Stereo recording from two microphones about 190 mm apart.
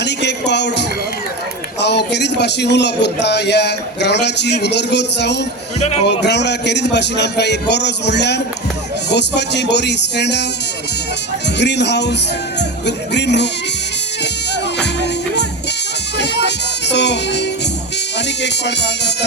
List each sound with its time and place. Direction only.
0.0 s music: 65° left (ahead or behind)
1.8 s speech: 65° left (ahead or behind)
11.5 s speech: 65° left (ahead or behind)
14.5 s music: 65° left (ahead or behind)
18.4 s speech: 65° left (ahead or behind)